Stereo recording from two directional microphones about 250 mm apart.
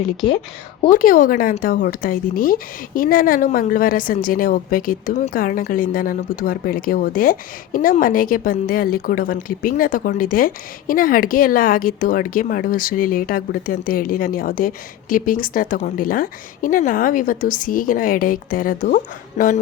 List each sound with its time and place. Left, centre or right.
0.9 s speech: left
19.4 s music: left